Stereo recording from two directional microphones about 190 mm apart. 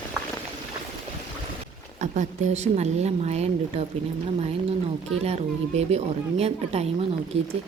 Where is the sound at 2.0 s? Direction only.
40° right (ahead or behind).